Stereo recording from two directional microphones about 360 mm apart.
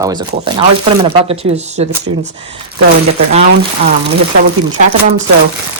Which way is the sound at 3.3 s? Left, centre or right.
Right.